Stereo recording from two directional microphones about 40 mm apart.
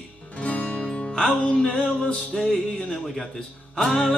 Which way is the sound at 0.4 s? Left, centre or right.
Left.